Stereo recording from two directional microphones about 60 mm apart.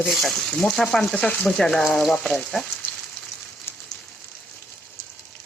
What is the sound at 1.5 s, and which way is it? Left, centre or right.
Speech, centre.